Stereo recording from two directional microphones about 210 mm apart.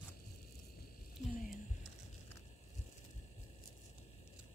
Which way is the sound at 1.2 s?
35° left (ahead or behind).